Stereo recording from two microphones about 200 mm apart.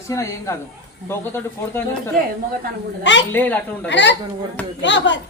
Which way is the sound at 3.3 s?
10° left (ahead or behind).